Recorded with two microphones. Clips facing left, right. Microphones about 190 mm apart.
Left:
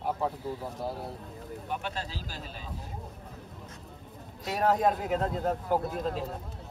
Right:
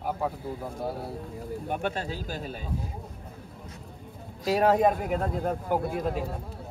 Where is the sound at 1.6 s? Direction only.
55° right (ahead or behind).